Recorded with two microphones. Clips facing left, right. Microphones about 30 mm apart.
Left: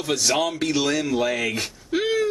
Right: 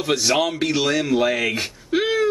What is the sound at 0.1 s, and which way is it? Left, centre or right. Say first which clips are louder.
Speech: right 2 dB; centre.